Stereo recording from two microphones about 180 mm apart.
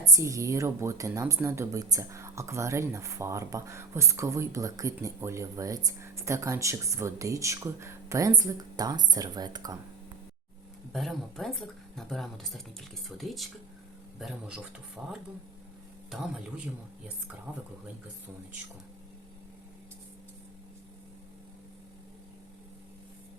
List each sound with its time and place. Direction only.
0.0 s speech: 15° right (ahead or behind)
10.9 s speech: centre (ahead or behind)
17.5 s speech: 10° right (ahead or behind)